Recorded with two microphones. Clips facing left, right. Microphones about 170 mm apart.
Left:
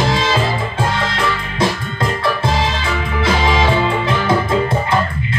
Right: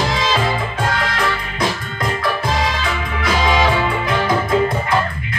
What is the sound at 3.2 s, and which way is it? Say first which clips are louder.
Music: even; 25° left (ahead or behind).